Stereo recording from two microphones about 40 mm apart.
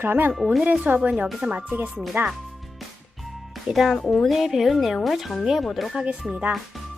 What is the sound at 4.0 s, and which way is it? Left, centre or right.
Speech, left.